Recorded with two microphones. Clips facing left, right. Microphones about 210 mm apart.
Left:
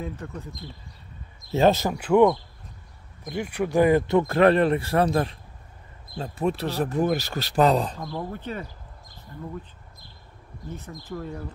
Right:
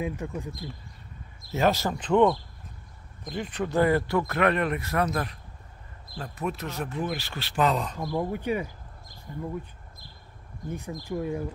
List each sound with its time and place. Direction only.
0.0 s speech: 10° right (ahead or behind)
1.5 s speech: 25° left (ahead or behind)
1.9 s speech: 10° left (ahead or behind); by 8.0 s 35° left (ahead or behind)
8.0 s speech: 10° right (ahead or behind)
10.7 s speech: 15° right (ahead or behind)